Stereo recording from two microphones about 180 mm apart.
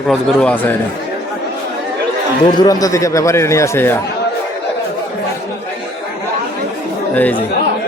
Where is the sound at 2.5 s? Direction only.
20° left (ahead or behind).